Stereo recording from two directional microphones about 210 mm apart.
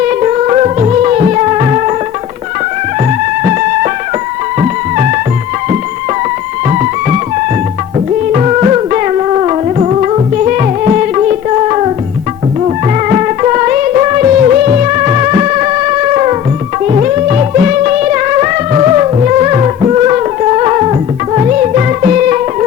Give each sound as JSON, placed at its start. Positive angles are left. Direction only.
{"t": 0.1, "sound": "music", "side_deg": -30}
{"t": 4.6, "sound": "music", "side_deg": -35}
{"t": 6.7, "sound": "music", "side_deg": -30}
{"t": 11.1, "sound": "singing", "side_deg": -25}
{"t": 13.4, "sound": "music", "side_deg": -25}
{"t": 13.7, "sound": "music of bollywood", "side_deg": -35}
{"t": 16.1, "sound": "music", "side_deg": -30}